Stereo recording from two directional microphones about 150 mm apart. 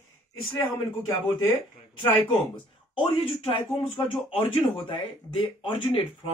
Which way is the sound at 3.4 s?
40° left (ahead or behind).